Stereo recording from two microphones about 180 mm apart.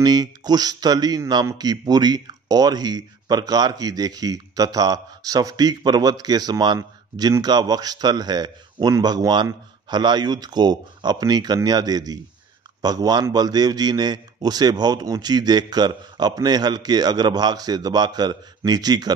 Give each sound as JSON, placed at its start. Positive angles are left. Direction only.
{"t": 0.0, "sound": "speech", "side_deg": -20}